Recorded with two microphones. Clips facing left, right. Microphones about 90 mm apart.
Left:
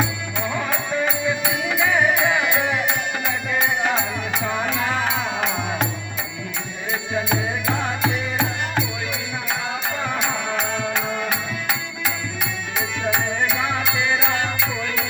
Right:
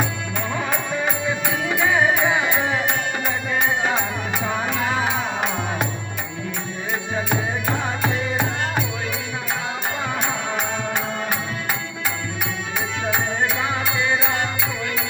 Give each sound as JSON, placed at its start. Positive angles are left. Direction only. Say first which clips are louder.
{"t": 0.0, "sound": "music", "louder": "left 1 dB", "side_deg": -50}
{"t": 1.9, "sound": "music", "louder": "even", "side_deg": -25}
{"t": 4.8, "sound": "music", "louder": "even", "side_deg": -20}
{"t": 8.0, "sound": "music", "louder": "right 1 dB", "side_deg": -15}
{"t": 10.5, "sound": "music", "louder": "left 1 dB", "side_deg": -5}
{"t": 13.8, "sound": "music", "louder": "even", "side_deg": -35}